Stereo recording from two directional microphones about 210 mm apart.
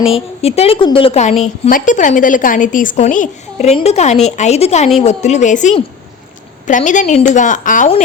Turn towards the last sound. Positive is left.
turn(degrees=40)  # may be behind; listen again after turning